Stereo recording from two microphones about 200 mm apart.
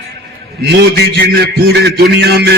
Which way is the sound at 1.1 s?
55° right (ahead or behind).